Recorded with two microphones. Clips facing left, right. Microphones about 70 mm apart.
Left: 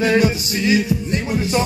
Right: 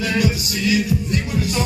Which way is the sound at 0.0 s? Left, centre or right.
Left.